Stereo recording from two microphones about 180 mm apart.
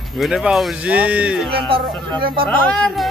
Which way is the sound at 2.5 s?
5° left (ahead or behind).